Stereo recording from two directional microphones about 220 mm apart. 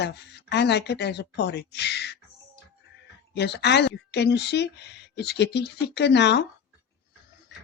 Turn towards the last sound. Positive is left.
turn(degrees=50)  # may be behind; listen again after turning